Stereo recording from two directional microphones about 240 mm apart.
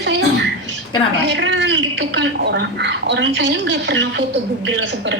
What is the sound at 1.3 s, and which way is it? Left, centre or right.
A woman's voice, right.